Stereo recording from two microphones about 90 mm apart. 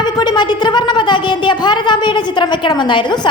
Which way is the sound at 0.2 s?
55° left (ahead or behind).